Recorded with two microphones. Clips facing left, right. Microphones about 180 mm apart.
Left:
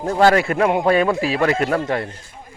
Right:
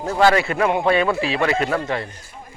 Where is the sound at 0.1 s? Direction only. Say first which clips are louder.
Left 2 dB; 35° left (ahead or behind).